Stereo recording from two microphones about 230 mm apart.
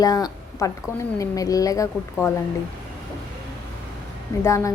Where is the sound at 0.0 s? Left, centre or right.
Centre.